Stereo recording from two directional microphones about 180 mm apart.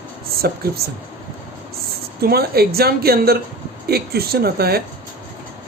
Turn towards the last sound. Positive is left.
turn(degrees=-60)  # may be behind; listen again after turning